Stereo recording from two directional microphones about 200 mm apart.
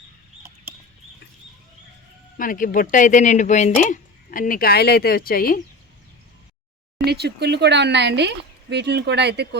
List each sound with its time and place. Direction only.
2.4 s a woman's voice: 40° left (ahead or behind)
7.0 s speech: 55° right (ahead or behind)